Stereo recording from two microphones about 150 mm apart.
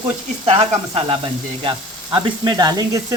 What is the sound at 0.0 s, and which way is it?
Sizzle, 40° right (ahead or behind).